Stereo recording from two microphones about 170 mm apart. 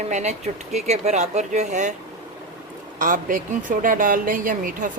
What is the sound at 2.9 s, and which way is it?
A woman's voice, 50° right (ahead or behind).